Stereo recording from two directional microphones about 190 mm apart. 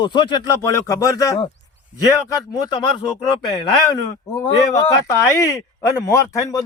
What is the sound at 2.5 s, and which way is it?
Speech, 20° left (ahead or behind).